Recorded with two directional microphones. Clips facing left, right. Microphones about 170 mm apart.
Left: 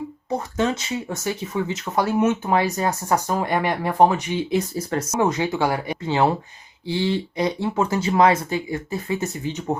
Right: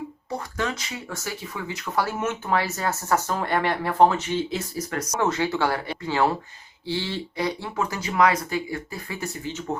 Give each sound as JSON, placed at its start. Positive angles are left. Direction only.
{"t": 0.3, "sound": "speech", "side_deg": 25}
{"t": 4.7, "sound": "speech", "side_deg": 30}